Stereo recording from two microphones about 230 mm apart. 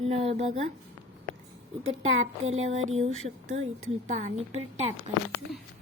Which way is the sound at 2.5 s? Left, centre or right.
Right.